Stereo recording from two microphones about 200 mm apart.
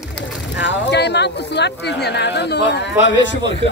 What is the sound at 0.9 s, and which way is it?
Speech, 55° left (ahead or behind).